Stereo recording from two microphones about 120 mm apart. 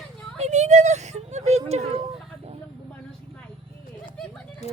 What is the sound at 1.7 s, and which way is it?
Speech, 60° right (ahead or behind).